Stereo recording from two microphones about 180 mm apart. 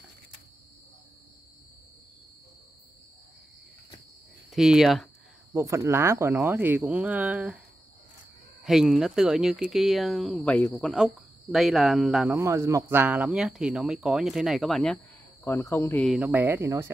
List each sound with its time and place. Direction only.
4.5 s speech: 5° right (ahead or behind)
5.5 s speech: 15° right (ahead or behind)
8.6 s speech: centre (ahead or behind)
12.4 s speech: 15° right (ahead or behind); by 15.0 s centre (ahead or behind)
15.4 s speech: 15° left (ahead or behind)
16.0 s speech: centre (ahead or behind)